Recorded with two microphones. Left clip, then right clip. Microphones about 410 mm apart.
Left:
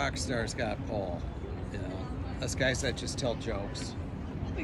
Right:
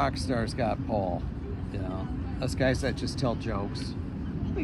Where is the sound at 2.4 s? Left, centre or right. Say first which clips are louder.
Right 3 dB; centre.